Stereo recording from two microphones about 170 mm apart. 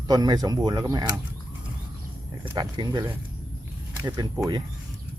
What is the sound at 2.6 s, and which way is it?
Speech, 25° right (ahead or behind).